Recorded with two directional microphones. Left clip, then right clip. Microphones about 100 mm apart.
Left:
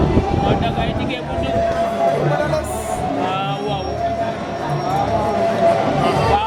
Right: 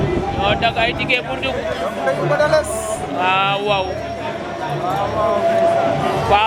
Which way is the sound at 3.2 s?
15° right (ahead or behind).